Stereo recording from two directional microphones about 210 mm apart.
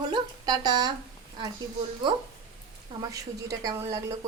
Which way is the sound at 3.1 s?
15° right (ahead or behind).